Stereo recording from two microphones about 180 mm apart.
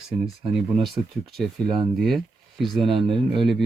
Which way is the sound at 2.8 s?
30° right (ahead or behind).